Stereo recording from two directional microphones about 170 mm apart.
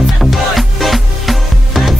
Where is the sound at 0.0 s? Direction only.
Centre (ahead or behind).